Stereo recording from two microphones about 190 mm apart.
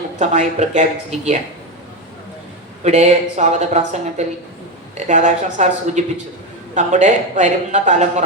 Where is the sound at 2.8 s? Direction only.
35° right (ahead or behind).